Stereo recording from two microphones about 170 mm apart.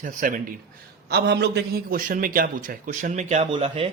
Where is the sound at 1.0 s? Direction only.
75° right (ahead or behind); by 3.5 s 40° right (ahead or behind).